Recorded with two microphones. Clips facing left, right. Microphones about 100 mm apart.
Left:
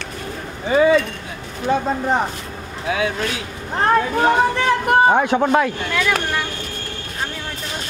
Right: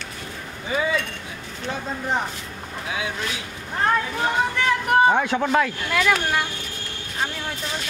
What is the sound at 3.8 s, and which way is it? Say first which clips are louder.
Speech: left 6 dB; 50° left (ahead or behind).